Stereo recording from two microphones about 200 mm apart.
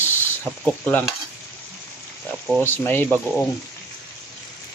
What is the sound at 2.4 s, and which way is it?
Speech, 10° left (ahead or behind).